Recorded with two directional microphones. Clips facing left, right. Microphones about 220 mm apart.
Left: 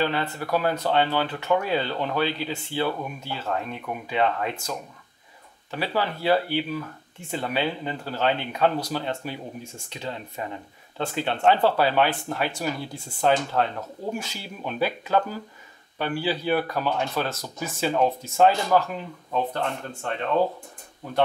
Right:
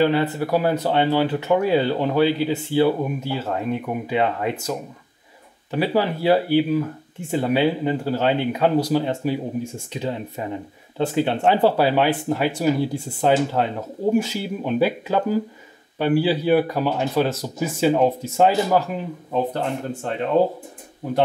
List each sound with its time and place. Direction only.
0.0 s speech: 10° right (ahead or behind)